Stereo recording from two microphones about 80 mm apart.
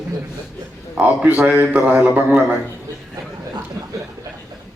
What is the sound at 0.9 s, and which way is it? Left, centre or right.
A man's voice, centre.